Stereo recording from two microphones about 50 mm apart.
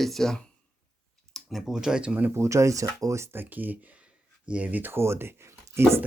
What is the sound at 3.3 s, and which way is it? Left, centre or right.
Speech, right.